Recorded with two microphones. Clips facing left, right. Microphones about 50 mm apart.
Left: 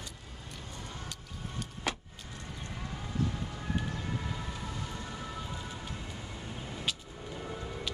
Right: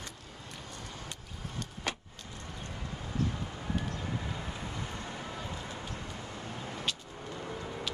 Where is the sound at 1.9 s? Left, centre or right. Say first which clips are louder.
Left 2 dB; centre.